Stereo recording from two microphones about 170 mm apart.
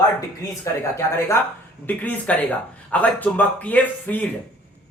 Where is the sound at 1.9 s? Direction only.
10° left (ahead or behind).